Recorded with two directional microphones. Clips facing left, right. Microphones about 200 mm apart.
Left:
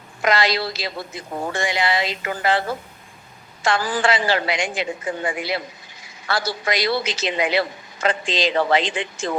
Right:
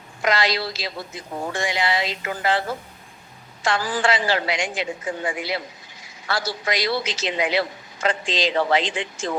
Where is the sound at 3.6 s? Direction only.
55° left (ahead or behind).